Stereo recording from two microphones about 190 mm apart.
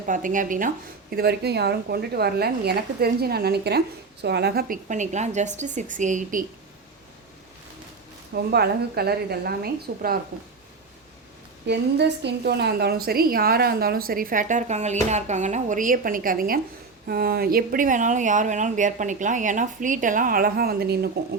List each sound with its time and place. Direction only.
0.1 s a woman's voice: 45° right (ahead or behind)
1.1 s a woman's voice: 55° right (ahead or behind); by 6.4 s 40° right (ahead or behind)
8.3 s a woman's voice: 55° right (ahead or behind)
11.6 s a woman's voice: 65° right (ahead or behind)